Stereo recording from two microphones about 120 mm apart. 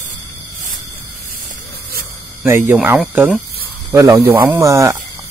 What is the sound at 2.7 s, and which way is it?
Speech, 15° right (ahead or behind).